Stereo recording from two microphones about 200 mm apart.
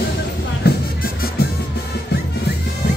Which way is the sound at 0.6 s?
55° left (ahead or behind).